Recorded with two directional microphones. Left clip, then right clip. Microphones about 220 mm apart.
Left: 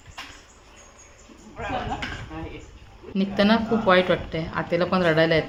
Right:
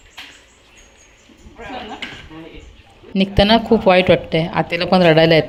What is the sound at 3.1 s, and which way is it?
A woman's voice, 30° right (ahead or behind).